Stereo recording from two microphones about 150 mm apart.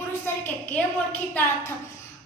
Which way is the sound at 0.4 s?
10° left (ahead or behind).